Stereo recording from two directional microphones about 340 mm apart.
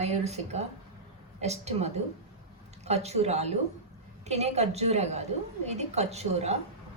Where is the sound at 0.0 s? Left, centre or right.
Centre.